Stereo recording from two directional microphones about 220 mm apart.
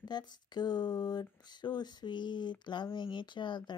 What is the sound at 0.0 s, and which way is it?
Speech, 20° left (ahead or behind).